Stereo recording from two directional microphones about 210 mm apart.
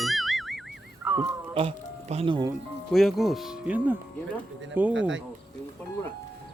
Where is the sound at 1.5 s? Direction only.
30° right (ahead or behind).